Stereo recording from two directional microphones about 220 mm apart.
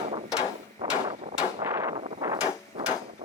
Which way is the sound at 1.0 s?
30° right (ahead or behind).